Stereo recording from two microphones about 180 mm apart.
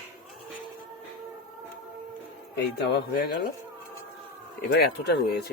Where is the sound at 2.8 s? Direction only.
60° left (ahead or behind).